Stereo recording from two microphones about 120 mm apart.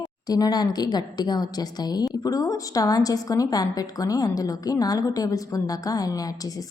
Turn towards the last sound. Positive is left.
turn(degrees=30)  # may be behind; listen again after turning